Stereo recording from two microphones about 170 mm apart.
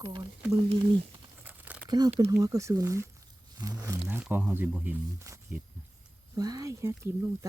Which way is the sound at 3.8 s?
15° right (ahead or behind).